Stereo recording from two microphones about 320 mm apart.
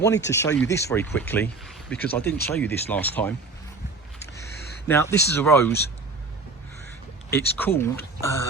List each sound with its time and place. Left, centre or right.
0.3 s speech: centre
4.9 s speech: centre
7.3 s speech: centre